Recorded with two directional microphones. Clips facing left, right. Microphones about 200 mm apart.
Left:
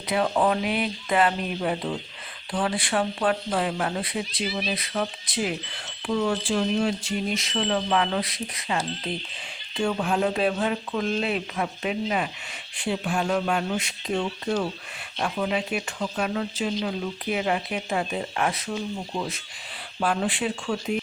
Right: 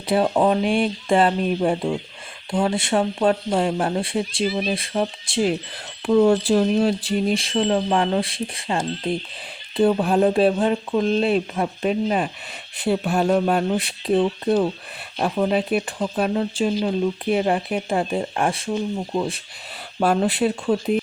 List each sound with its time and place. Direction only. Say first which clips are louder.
0.3 s speech: right 5 dB; 30° right (ahead or behind)